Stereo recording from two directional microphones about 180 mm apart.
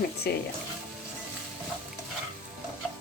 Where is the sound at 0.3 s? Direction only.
60° left (ahead or behind).